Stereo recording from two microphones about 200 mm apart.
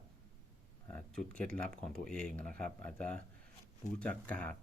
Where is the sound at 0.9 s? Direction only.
5° left (ahead or behind).